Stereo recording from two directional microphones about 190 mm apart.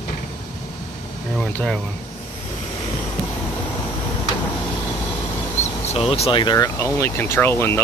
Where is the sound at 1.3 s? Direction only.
5° left (ahead or behind).